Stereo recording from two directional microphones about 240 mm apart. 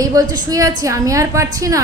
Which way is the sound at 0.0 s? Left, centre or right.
Centre.